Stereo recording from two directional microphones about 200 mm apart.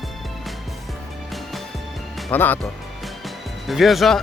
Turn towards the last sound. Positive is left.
turn(degrees=0)  # may be behind; listen again after turning